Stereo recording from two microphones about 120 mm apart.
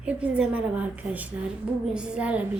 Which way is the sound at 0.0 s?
10° right (ahead or behind).